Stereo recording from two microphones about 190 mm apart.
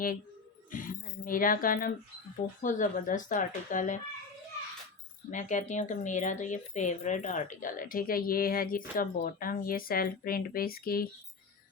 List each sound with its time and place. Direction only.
0.7 s speech: 45° left (ahead or behind)
5.3 s speech: 40° left (ahead or behind)